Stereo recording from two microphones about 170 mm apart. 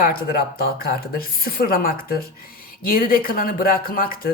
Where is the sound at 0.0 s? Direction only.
60° left (ahead or behind).